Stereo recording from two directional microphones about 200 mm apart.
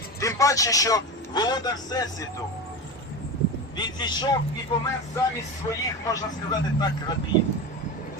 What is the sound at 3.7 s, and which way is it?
A man's voice, 20° left (ahead or behind).